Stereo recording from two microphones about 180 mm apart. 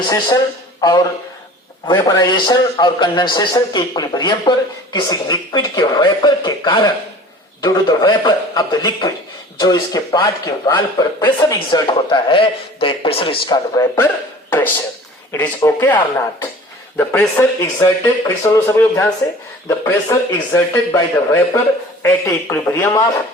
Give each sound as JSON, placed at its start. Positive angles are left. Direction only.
{"t": 0.8, "sound": "a man's voice", "side_deg": 20}
{"t": 14.5, "sound": "speech", "side_deg": 10}